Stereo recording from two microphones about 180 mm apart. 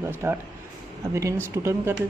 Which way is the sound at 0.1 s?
15° right (ahead or behind).